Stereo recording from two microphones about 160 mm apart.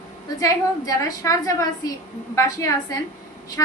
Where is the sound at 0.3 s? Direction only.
20° left (ahead or behind).